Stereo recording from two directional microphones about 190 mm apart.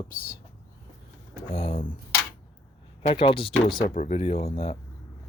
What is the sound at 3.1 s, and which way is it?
Speech, 25° left (ahead or behind).